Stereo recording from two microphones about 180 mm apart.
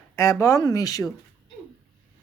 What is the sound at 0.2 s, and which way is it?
Speech, 15° left (ahead or behind).